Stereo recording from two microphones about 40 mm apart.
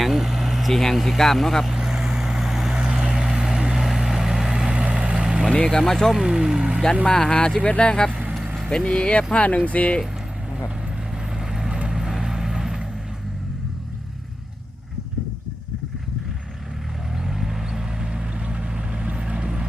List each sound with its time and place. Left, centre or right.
0.0 s vehicle: centre
0.7 s speech: centre
1.7 s vehicle: centre
2.7 s vehicle: centre
4.9 s vehicle: right
5.1 s vehicle: right
5.8 s speech: centre
6.1 s a sound: centre
7.0 s speech: left
7.6 s speech: left
11.3 s vehicle: centre
17.2 s vehicle: centre